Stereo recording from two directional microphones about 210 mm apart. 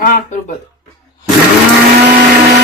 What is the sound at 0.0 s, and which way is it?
Speech, 35° left (ahead or behind).